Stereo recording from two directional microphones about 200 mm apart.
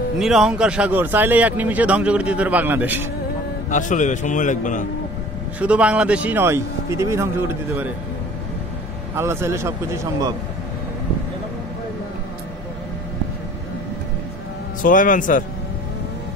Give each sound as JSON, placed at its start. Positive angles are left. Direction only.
{"t": 0.2, "sound": "speech", "side_deg": 0}
{"t": 3.7, "sound": "a man's voice", "side_deg": 40}
{"t": 5.6, "sound": "speech", "side_deg": -5}
{"t": 9.1, "sound": "speech", "side_deg": -15}
{"t": 14.8, "sound": "a man's voice", "side_deg": 40}